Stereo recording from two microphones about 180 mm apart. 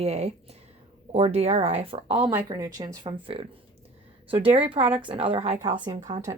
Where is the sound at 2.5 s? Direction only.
20° right (ahead or behind).